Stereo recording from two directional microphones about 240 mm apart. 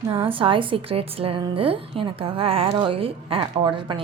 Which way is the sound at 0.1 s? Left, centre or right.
Right.